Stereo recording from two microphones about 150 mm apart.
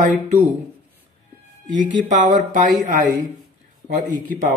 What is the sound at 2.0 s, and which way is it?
Speech, 55° right (ahead or behind).